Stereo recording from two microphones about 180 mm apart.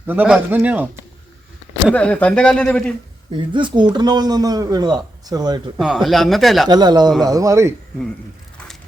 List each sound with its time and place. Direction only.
0.1 s speech: 10° right (ahead or behind)
1.9 s speech: 5° left (ahead or behind)
3.3 s speech: 25° right (ahead or behind)
5.8 s speech: centre (ahead or behind)
6.7 s speech: 25° right (ahead or behind)